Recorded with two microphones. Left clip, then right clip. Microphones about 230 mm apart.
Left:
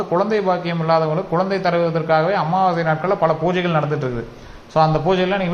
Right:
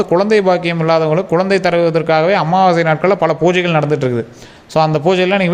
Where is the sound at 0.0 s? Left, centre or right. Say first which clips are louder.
Right 6 dB; right.